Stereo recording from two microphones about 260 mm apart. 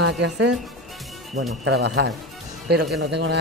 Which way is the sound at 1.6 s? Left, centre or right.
Right.